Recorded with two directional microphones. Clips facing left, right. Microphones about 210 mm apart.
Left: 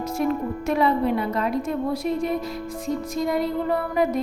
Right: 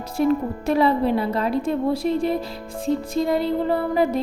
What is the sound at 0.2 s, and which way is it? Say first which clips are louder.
A woman's voice: right 5 dB; 30° right (ahead or behind).